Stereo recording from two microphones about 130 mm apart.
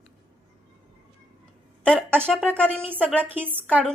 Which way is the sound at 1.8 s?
5° left (ahead or behind).